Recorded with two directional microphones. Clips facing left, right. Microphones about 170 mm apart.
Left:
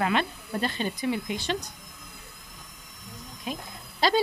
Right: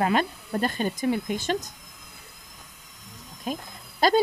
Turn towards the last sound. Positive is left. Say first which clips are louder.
# right 3 dB
turn(degrees=-45)  # may be behind; listen again after turning